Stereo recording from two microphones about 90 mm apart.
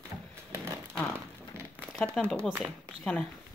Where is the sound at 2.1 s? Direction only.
5° left (ahead or behind).